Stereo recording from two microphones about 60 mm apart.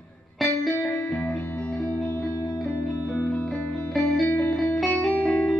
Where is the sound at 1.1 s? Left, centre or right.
Left.